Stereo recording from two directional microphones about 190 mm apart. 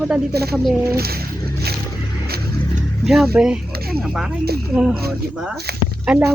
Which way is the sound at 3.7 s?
55° right (ahead or behind).